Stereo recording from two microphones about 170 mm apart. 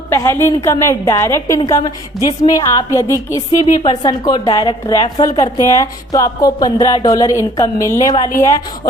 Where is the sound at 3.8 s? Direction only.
30° left (ahead or behind).